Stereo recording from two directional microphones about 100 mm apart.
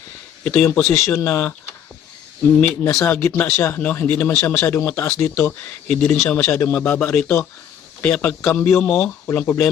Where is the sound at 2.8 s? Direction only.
30° left (ahead or behind).